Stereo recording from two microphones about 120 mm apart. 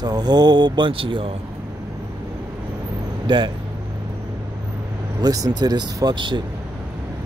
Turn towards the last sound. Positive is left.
turn(degrees=-40)  # may be behind; listen again after turning